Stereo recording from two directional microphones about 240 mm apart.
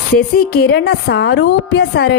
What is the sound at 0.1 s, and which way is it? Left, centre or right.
A woman's voice, left.